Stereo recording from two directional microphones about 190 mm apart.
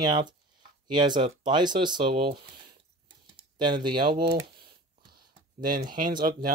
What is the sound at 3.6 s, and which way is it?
Speech, 25° right (ahead or behind).